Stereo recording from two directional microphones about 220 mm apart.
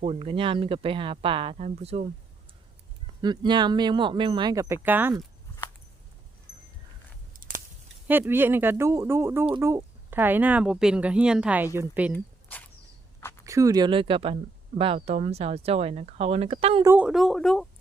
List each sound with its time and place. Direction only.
0.0 s speech: 25° right (ahead or behind)
3.2 s speech: 20° right (ahead or behind)
7.3 s a sound: 40° right (ahead or behind)
8.0 s speech: 10° right (ahead or behind)
12.1 s a sound: 5° left (ahead or behind)
13.4 s speech: 15° right (ahead or behind)
16.8 s speech: 10° right (ahead or behind)